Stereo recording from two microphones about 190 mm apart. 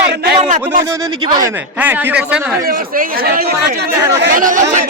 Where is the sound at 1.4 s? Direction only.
10° right (ahead or behind).